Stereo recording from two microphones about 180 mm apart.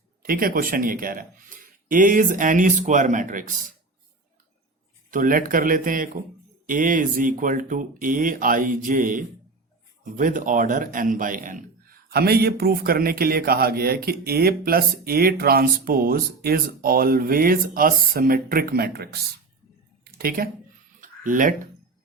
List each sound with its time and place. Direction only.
0.2 s speech: 50° right (ahead or behind)
5.1 s a man's voice: 50° right (ahead or behind)
20.1 s a sound: 55° right (ahead or behind)